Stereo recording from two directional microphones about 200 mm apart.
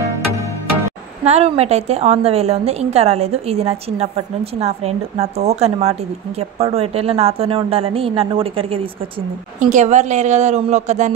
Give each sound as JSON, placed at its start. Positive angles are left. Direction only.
{"t": 1.2, "sound": "a woman's voice", "side_deg": -30}
{"t": 9.6, "sound": "a woman's voice", "side_deg": -40}